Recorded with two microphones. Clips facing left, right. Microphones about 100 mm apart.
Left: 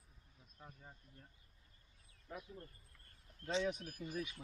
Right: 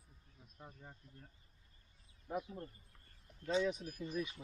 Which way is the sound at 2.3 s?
25° right (ahead or behind).